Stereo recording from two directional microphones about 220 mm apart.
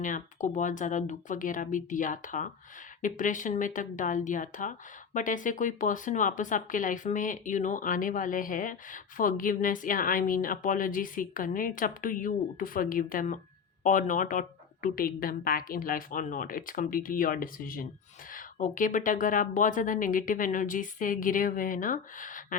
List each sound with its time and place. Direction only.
0.0 s speech: 35° left (ahead or behind)